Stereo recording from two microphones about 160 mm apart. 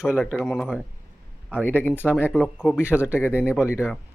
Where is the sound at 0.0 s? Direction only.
5° right (ahead or behind); by 2.4 s 15° left (ahead or behind).